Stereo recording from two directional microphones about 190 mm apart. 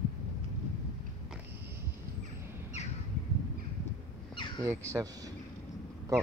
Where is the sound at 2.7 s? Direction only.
35° left (ahead or behind).